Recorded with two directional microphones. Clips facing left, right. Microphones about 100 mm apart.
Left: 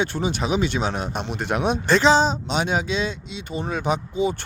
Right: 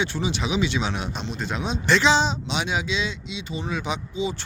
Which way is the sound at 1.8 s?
40° left (ahead or behind).